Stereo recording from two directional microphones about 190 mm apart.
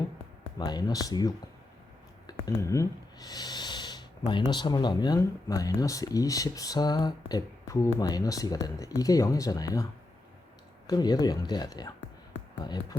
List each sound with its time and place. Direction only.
0.6 s speech: 20° left (ahead or behind)
10.8 s speech: 20° left (ahead or behind)